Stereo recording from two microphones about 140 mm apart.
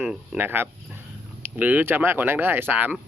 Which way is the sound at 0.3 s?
15° right (ahead or behind).